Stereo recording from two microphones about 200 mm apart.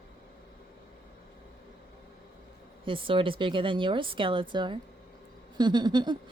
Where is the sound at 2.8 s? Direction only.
25° right (ahead or behind).